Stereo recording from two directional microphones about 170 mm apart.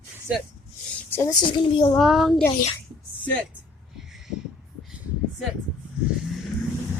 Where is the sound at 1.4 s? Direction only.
30° left (ahead or behind).